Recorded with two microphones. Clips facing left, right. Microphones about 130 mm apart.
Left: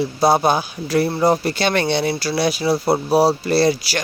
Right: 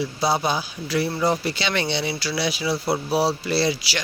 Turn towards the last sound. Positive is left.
turn(degrees=45)  # may be behind; listen again after turning